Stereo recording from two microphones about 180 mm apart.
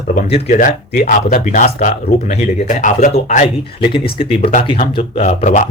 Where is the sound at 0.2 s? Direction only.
35° left (ahead or behind).